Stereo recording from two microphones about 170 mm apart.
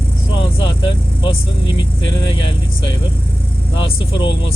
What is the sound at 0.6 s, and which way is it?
Vehicle, 30° left (ahead or behind).